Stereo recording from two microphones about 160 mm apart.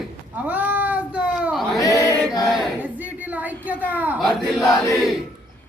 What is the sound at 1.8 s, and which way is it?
Speech, 20° left (ahead or behind).